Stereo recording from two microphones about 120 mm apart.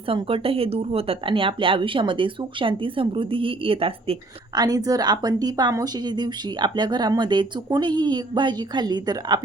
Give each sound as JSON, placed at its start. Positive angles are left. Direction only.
{"t": 0.1, "sound": "speech", "side_deg": -50}
{"t": 4.5, "sound": "speech", "side_deg": -30}